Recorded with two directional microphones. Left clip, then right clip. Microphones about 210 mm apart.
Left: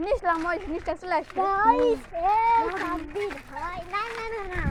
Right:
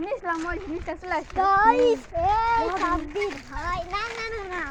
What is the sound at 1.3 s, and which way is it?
A child's voice, 40° right (ahead or behind).